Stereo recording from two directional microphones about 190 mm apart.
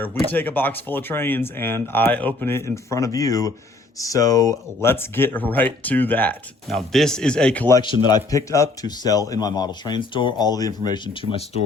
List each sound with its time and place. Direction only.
0.0 s speech: 10° left (ahead or behind)
7.8 s speech: 25° left (ahead or behind)